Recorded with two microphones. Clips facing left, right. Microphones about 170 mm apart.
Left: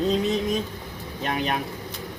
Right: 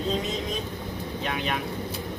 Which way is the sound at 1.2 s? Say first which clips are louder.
Left 4 dB; 40° left (ahead or behind).